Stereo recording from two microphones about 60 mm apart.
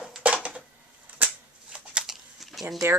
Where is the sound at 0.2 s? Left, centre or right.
Right.